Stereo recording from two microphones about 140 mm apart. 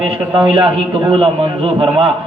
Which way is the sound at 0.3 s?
40° right (ahead or behind).